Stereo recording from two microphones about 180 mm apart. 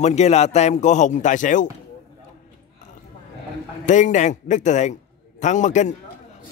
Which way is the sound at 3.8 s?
45° left (ahead or behind).